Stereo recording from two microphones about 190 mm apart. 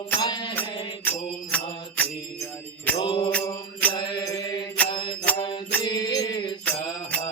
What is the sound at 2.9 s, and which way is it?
Mantra, 25° left (ahead or behind).